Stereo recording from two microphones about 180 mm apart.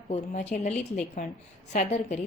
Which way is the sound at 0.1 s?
40° left (ahead or behind).